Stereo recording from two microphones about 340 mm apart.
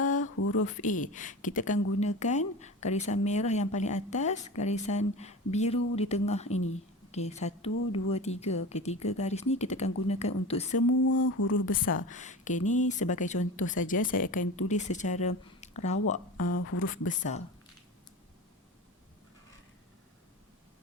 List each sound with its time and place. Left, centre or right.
0.0 s a sound: left
0.3 s a sound: left
0.8 s speech: left
10.7 s speech: left
11.9 s speech: left
14.4 s speech: left
14.7 s speech: left
16.6 s speech: left